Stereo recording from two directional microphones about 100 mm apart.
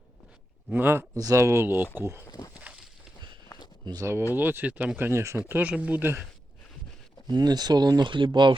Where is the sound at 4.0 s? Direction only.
25° right (ahead or behind).